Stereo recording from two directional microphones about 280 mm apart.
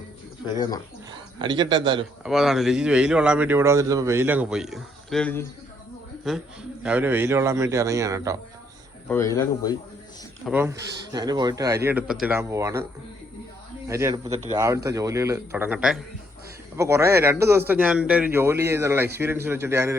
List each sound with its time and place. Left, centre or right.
0.4 s speech: centre
1.4 s speech: centre
2.2 s a man's voice: centre
9.0 s speech: centre
10.4 s speech: centre
13.8 s speech: centre